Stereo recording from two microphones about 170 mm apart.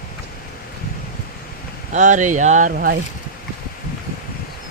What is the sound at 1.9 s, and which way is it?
Speech, 45° right (ahead or behind).